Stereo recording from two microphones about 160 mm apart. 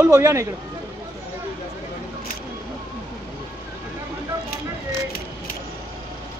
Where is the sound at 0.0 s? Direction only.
15° right (ahead or behind).